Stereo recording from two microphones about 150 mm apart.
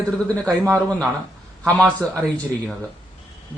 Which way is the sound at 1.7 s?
5° left (ahead or behind).